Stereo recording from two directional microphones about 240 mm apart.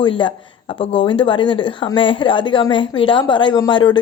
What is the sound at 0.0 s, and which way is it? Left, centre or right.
A woman's voice, left.